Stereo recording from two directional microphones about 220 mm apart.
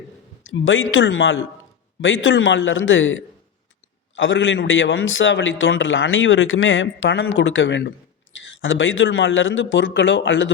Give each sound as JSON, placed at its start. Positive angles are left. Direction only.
{"t": 0.4, "sound": "a man's voice", "side_deg": 60}